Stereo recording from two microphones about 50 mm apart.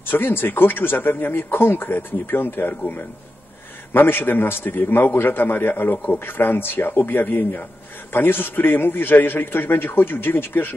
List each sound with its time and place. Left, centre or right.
0.0 s a man's voice: left
3.9 s a man's voice: left